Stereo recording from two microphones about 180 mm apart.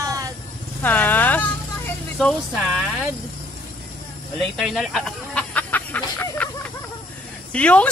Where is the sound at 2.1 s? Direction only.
Centre (ahead or behind).